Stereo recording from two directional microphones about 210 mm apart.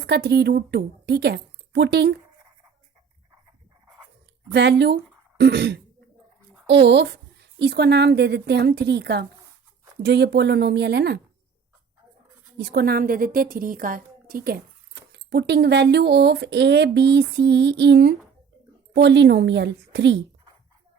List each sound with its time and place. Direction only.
0.1 s a woman's voice: 50° right (ahead or behind)
4.5 s a woman's voice: 55° right (ahead or behind)
12.5 s a woman's voice: 50° right (ahead or behind)